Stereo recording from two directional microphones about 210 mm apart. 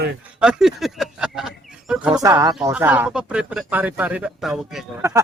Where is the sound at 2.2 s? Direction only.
15° right (ahead or behind); by 4.9 s centre (ahead or behind).